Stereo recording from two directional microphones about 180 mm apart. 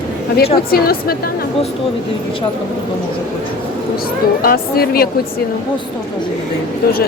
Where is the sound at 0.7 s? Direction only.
55° left (ahead or behind).